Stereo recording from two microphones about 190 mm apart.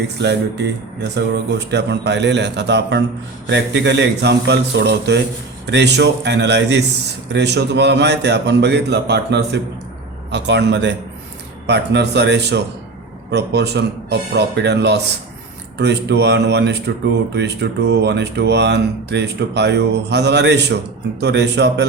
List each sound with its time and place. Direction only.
0.2 s a man's voice: 60° right (ahead or behind)